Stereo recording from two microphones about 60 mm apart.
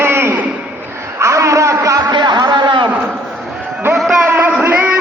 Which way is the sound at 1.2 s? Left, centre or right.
Right.